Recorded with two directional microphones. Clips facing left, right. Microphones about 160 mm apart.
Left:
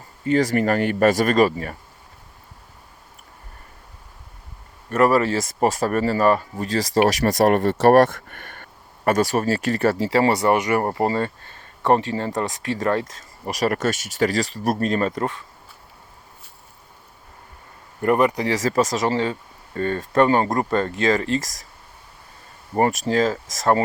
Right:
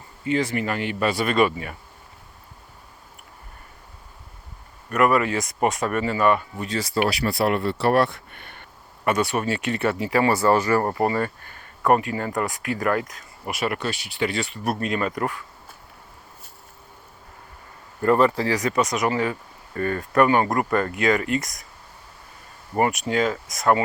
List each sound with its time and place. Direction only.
0.3 s speech: 40° left (ahead or behind)
4.9 s speech: 30° left (ahead or behind)
18.0 s speech: 15° left (ahead or behind)
22.9 s speech: 35° left (ahead or behind)